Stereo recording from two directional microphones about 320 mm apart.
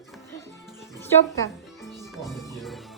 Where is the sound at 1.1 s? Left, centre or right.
Centre.